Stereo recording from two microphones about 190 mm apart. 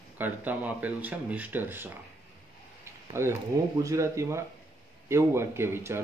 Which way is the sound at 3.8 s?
15° right (ahead or behind).